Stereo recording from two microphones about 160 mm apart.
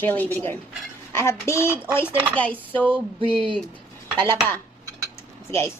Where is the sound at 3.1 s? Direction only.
35° right (ahead or behind).